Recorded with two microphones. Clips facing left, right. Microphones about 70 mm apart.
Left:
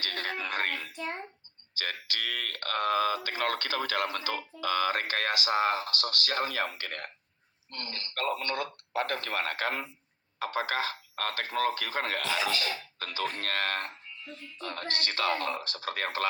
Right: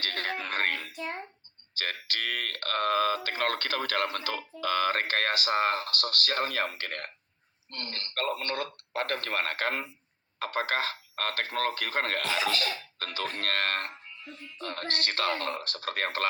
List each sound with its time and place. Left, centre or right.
0.0 s a sound: right
0.9 s a child's voice: centre
1.8 s speech: right
15.6 s speech: left
16.0 s speech: right